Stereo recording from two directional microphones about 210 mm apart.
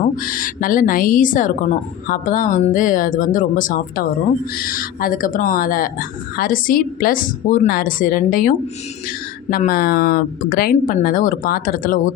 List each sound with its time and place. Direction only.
0.2 s speech: 40° left (ahead or behind)